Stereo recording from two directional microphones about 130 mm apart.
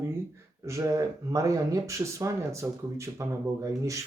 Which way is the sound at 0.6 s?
20° right (ahead or behind).